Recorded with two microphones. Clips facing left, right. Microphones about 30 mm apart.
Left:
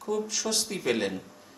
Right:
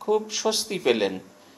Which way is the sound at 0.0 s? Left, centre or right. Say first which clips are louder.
Right 6 dB; right.